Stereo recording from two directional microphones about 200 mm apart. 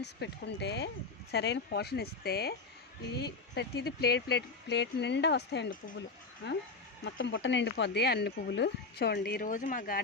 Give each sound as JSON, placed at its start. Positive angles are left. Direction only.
{"t": 0.0, "sound": "speech", "side_deg": 60}